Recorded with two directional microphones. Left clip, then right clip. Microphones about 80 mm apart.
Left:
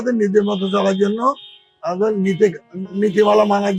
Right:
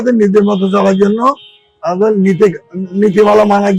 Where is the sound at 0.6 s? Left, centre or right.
Right.